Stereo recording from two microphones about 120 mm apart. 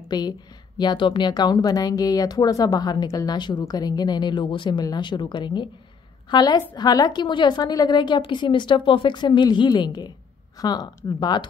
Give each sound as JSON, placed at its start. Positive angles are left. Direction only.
{"t": 0.1, "sound": "a woman's voice", "side_deg": 35}